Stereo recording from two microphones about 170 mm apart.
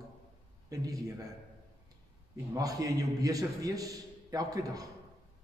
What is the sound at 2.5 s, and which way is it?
A man's voice, 20° right (ahead or behind).